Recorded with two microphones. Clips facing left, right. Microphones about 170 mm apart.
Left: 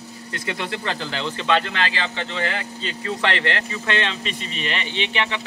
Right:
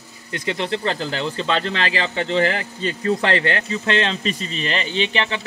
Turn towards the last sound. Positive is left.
turn(degrees=-35)  # may be behind; listen again after turning